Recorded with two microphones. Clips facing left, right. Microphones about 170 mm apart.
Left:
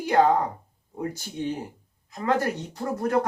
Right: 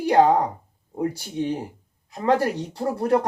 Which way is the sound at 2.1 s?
30° right (ahead or behind).